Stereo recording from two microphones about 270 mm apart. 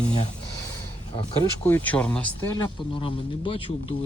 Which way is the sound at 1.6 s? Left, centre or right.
Centre.